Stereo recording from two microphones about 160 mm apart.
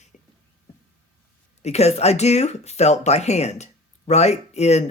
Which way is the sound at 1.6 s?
40° left (ahead or behind).